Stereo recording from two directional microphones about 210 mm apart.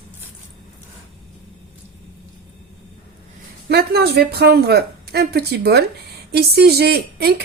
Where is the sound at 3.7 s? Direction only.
50° right (ahead or behind).